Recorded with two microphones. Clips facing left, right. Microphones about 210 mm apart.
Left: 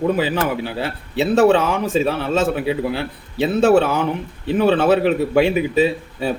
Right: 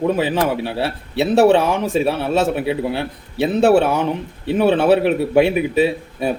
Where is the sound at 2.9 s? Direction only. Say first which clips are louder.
Right 1 dB; 15° right (ahead or behind).